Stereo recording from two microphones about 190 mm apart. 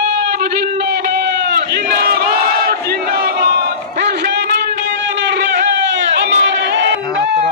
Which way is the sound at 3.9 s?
60° right (ahead or behind).